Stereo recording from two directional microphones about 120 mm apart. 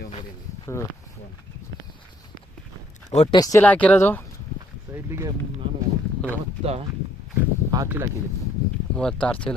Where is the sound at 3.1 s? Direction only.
65° left (ahead or behind).